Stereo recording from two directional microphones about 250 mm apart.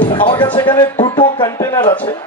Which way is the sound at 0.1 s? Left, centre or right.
Centre.